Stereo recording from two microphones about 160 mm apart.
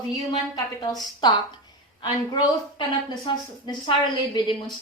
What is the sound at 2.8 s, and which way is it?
A woman's voice, 30° left (ahead or behind).